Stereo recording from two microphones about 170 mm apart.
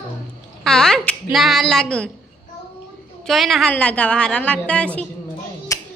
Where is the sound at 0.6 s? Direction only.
5° left (ahead or behind).